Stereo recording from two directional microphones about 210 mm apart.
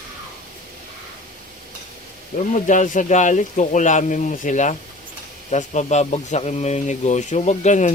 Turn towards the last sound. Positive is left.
turn(degrees=35)  # may be behind; listen again after turning